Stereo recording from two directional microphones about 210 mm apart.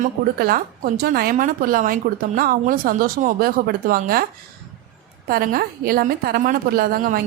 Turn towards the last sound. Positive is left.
turn(degrees=-45)  # may be behind; listen again after turning